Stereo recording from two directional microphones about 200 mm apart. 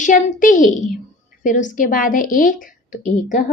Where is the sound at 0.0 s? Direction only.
40° left (ahead or behind).